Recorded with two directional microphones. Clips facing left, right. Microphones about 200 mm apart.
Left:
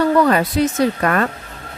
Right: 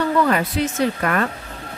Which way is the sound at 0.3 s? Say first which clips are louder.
Left 4 dB; 40° left (ahead or behind).